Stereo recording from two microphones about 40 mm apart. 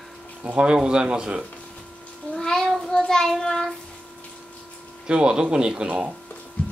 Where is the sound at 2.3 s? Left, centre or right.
Centre.